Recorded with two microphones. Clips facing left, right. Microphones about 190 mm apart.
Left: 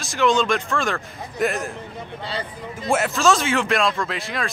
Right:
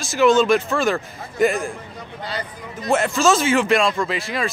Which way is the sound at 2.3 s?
30° left (ahead or behind).